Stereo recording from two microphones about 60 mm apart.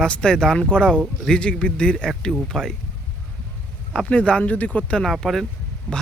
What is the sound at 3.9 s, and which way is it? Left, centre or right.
Speech, centre.